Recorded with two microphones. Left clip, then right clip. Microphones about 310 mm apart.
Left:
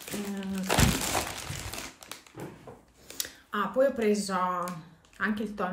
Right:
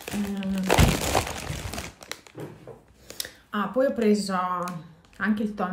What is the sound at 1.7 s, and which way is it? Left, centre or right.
Typewriter, right.